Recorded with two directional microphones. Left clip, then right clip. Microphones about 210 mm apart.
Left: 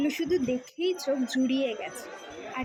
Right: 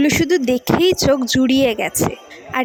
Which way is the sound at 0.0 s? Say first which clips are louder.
Right 12 dB; 45° right (ahead or behind).